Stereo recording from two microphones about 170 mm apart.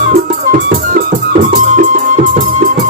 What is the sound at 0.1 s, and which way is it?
Music, 55° right (ahead or behind).